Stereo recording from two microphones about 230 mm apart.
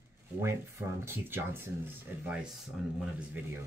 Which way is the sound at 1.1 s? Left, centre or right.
Centre.